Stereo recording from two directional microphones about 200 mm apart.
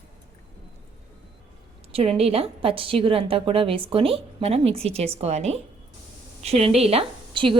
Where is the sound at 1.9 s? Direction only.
30° right (ahead or behind).